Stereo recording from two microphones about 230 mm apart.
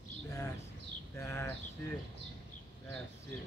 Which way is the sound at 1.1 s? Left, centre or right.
Centre.